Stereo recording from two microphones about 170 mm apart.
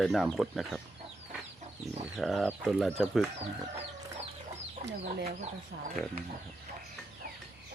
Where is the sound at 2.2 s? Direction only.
Centre (ahead or behind).